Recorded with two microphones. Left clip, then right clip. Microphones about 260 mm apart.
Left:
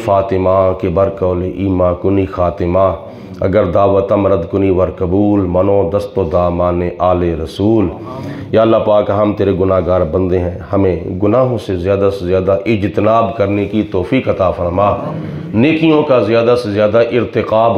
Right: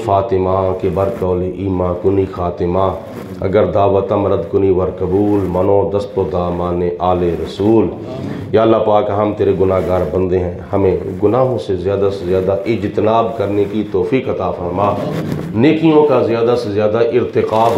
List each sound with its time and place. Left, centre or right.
0.0 s a man's voice: left